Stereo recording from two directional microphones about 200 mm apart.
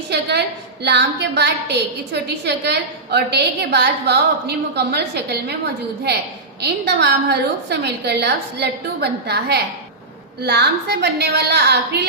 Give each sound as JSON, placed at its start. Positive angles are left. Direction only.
{"t": 0.1, "sound": "a woman's voice", "side_deg": -55}
{"t": 6.6, "sound": "a woman's voice", "side_deg": -55}